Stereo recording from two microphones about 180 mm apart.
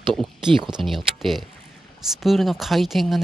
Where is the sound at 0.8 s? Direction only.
Centre (ahead or behind).